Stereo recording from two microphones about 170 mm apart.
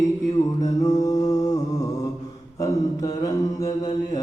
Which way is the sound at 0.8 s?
20° left (ahead or behind).